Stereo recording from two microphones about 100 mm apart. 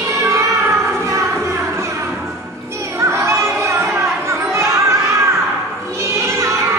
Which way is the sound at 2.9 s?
25° right (ahead or behind).